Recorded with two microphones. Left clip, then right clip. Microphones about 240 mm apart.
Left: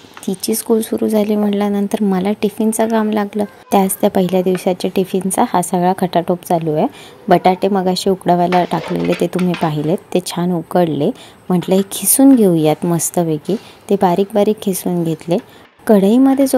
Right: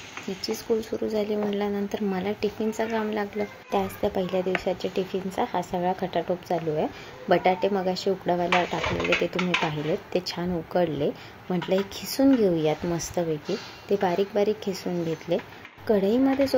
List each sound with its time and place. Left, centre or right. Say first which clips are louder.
0.4 s a woman's voice: left 11 dB; left